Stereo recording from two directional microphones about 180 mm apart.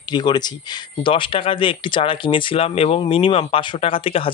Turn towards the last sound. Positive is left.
turn(degrees=30)  # may be behind; listen again after turning